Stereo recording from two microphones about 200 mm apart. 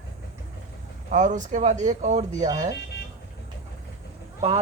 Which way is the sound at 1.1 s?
40° right (ahead or behind).